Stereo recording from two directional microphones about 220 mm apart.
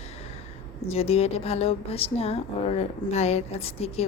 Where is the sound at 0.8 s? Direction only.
25° left (ahead or behind).